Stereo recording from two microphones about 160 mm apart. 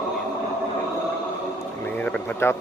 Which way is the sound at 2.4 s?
15° left (ahead or behind).